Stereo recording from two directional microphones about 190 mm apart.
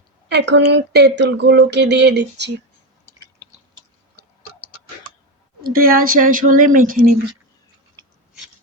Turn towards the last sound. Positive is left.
turn(degrees=-45)  # may be behind; listen again after turning